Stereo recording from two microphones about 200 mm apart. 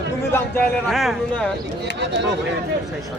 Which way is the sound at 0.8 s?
Centre (ahead or behind).